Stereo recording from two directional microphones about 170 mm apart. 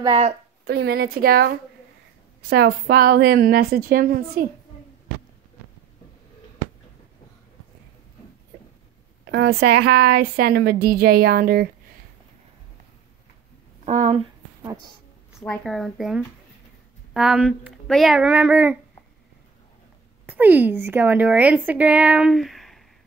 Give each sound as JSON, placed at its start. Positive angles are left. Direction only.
{"t": 0.0, "sound": "a woman's voice", "side_deg": -30}
{"t": 0.7, "sound": "a woman's voice", "side_deg": -70}
{"t": 9.2, "sound": "a woman's voice", "side_deg": -75}
{"t": 13.8, "sound": "speech", "side_deg": -45}
{"t": 14.6, "sound": "a woman's voice", "side_deg": -25}
{"t": 15.3, "sound": "speech", "side_deg": 5}
{"t": 20.2, "sound": "a woman's voice", "side_deg": -10}